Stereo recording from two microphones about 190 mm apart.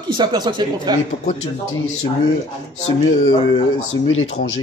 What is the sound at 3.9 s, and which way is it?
Speech, 90° left.